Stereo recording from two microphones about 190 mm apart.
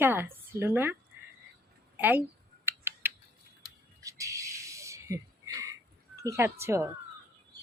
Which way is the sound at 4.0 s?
15° right (ahead or behind).